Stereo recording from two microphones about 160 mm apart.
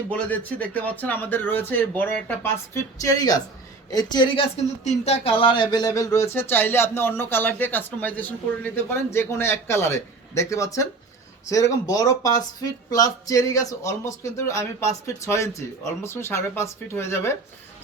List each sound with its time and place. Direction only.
0.1 s speech: 10° left (ahead or behind); by 4.4 s 30° left (ahead or behind)
4.8 s speech: 45° left (ahead or behind); by 17.3 s 15° left (ahead or behind)